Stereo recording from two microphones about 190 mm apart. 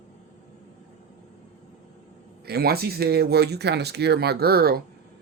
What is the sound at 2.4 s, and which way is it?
Speech, 55° right (ahead or behind).